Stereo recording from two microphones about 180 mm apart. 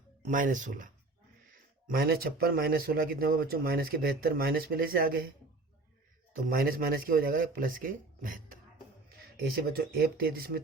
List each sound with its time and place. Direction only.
0.3 s speech: 45° right (ahead or behind)
6.5 s speech: 55° right (ahead or behind)
9.7 s speech: 60° right (ahead or behind)